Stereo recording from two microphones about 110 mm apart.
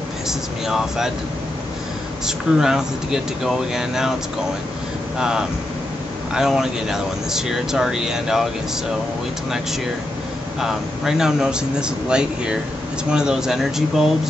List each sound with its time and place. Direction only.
0.3 s speech: 5° right (ahead or behind)
2.2 s speech: 5° right (ahead or behind)
5.2 s speech: 5° right (ahead or behind)
10.6 s speech: 5° right (ahead or behind)